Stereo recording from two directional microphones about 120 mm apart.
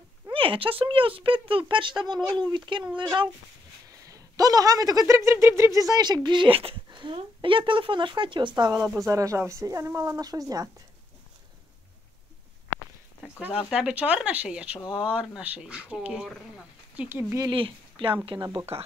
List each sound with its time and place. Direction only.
0.3 s speech: 45° right (ahead or behind)
4.1 s speech: 30° right (ahead or behind)
8.9 s speech: 25° right (ahead or behind)
13.4 s speech: 5° right (ahead or behind)
17.5 s speech: 45° right (ahead or behind)